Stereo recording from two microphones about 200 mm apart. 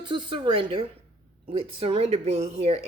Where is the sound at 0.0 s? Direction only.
25° right (ahead or behind).